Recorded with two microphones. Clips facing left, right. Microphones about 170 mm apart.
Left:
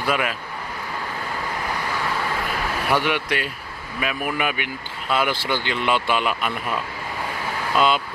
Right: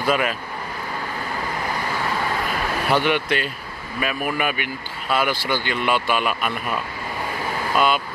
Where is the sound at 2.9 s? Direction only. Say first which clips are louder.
Right 2 dB; 10° left (ahead or behind).